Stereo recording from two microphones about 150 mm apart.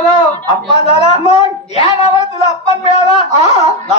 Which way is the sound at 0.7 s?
40° left (ahead or behind).